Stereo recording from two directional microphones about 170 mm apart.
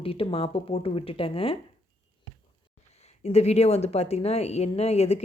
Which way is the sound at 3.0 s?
40° left (ahead or behind).